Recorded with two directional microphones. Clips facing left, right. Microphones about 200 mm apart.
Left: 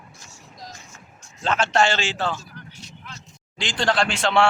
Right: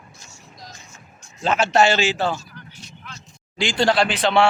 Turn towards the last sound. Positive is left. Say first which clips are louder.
# right 2 dB
turn(degrees=0)  # may be behind; listen again after turning